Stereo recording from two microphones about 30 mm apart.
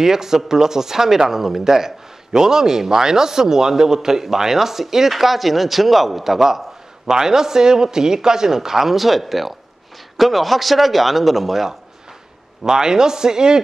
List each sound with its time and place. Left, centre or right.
0.0 s speech: centre
12.6 s a man's voice: right